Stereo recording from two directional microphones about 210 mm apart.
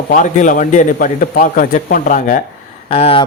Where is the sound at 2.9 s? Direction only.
25° left (ahead or behind).